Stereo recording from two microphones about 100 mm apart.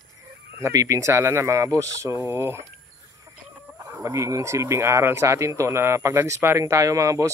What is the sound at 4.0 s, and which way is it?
Speech, 30° right (ahead or behind).